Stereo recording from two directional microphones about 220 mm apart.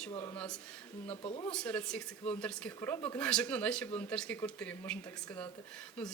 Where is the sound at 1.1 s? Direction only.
25° left (ahead or behind).